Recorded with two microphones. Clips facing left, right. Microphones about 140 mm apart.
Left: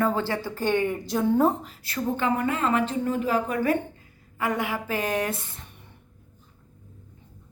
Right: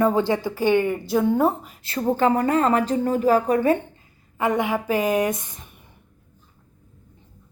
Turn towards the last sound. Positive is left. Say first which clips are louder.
# right 5 dB
turn(degrees=-15)  # may be behind; listen again after turning